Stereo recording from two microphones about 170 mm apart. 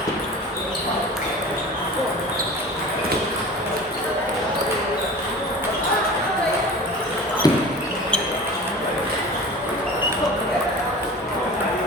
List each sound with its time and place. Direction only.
7.4 s basketball bounce: 20° left (ahead or behind)